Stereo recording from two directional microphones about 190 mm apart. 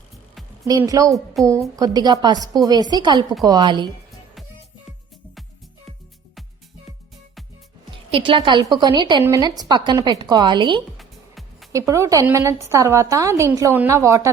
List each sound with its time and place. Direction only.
0.6 s a woman's voice: 15° right (ahead or behind)
1.4 s a woman's voice: centre (ahead or behind)
1.7 s a woman's voice: 20° right (ahead or behind)
4.9 s music: centre (ahead or behind)
8.1 s a woman's voice: 25° right (ahead or behind)
10.9 s music: centre (ahead or behind)
11.7 s a woman's voice: 15° right (ahead or behind)